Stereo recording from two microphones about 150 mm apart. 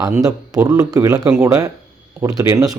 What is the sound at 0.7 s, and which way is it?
Speech, 25° right (ahead or behind).